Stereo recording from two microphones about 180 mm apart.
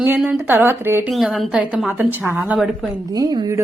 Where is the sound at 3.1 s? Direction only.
20° right (ahead or behind).